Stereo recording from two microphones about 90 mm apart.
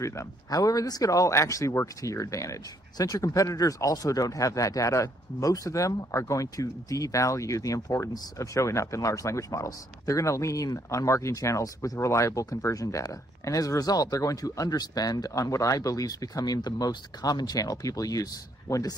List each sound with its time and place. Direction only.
0.0 s speech: 35° left (ahead or behind)